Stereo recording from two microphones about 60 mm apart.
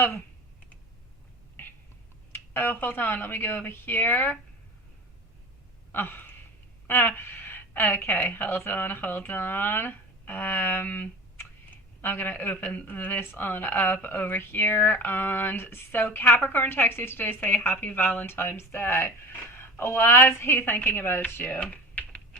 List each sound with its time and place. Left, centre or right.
2.3 s a sound: left
2.7 s a woman's voice: left
5.9 s gasp: left
6.8 s a woman's voice: left
21.6 s typing: left